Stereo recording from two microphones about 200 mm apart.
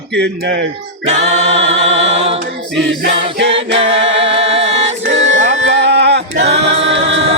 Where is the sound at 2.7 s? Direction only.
60° right (ahead or behind).